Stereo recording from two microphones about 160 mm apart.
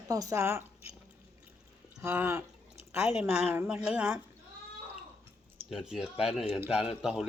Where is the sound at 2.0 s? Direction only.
15° right (ahead or behind).